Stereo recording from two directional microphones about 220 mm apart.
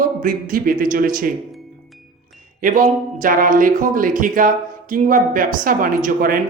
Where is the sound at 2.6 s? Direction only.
40° right (ahead or behind).